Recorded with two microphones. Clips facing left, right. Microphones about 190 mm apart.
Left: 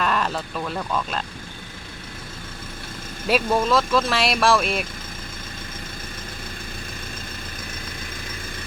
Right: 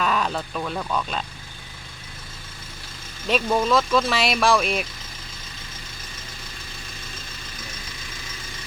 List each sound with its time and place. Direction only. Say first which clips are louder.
0.0 s speech: even; centre (ahead or behind)
3.2 s speech: left 1 dB; 5° left (ahead or behind)